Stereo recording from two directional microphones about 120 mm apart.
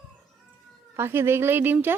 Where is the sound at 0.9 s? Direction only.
20° right (ahead or behind).